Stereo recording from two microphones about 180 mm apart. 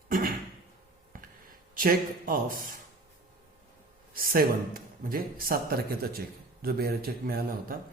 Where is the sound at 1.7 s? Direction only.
50° right (ahead or behind).